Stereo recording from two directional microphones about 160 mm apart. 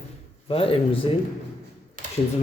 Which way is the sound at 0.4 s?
35° left (ahead or behind).